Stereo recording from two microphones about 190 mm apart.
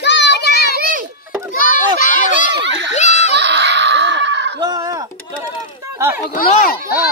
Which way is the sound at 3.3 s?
65° right (ahead or behind).